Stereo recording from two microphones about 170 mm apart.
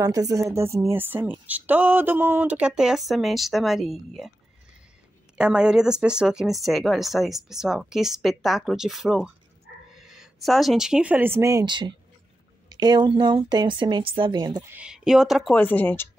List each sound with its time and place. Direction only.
0.0 s a woman's voice: 20° right (ahead or behind); by 4.3 s centre (ahead or behind)
5.4 s speech: 5° right (ahead or behind); by 14.7 s 25° right (ahead or behind)
14.7 s speech: 5° right (ahead or behind)
15.5 s speech: 10° left (ahead or behind)